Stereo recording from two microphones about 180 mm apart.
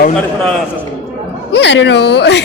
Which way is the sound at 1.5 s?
75° left (ahead or behind).